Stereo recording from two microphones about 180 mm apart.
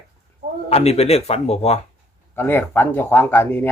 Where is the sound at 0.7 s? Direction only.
35° left (ahead or behind).